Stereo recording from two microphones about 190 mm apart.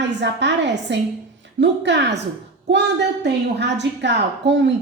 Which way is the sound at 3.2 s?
65° right (ahead or behind).